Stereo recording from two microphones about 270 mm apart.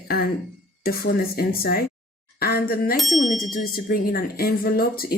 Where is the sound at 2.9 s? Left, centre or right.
Centre.